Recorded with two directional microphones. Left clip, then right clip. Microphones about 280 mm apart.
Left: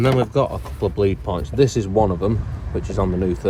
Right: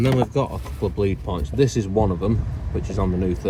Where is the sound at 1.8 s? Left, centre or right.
Left.